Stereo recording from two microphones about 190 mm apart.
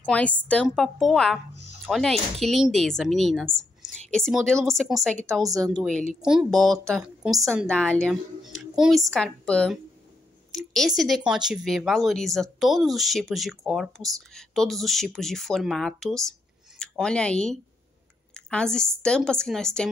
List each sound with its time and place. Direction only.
0.0 s a woman's voice: 5° left (ahead or behind)
6.2 s speech: centre (ahead or behind)
7.2 s a woman's voice: 20° right (ahead or behind)
7.6 s speech: 5° left (ahead or behind)
18.3 s a sound: 5° left (ahead or behind)
19.0 s speech: 5° left (ahead or behind)